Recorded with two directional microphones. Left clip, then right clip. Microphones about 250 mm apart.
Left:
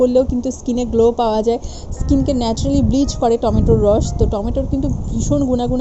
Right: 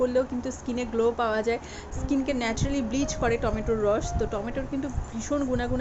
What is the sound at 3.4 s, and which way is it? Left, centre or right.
A woman's voice, centre.